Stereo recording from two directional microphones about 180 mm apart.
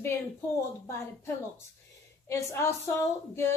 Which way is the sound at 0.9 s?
15° left (ahead or behind).